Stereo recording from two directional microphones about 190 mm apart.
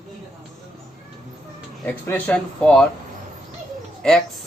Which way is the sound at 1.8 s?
10° left (ahead or behind).